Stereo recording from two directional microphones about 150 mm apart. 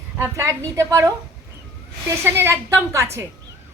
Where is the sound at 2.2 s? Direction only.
15° right (ahead or behind).